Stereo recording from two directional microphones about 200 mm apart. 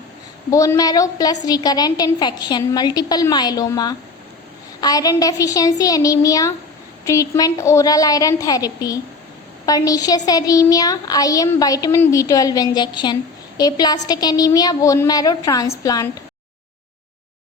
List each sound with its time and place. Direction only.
0.5 s a woman's voice: 15° left (ahead or behind)